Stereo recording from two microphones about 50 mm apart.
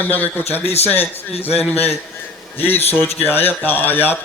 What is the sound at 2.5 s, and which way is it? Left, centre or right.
A man's voice, left.